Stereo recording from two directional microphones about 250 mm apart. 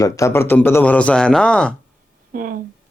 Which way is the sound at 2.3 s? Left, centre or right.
Right.